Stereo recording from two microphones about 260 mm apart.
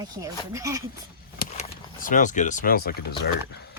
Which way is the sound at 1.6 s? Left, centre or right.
Left.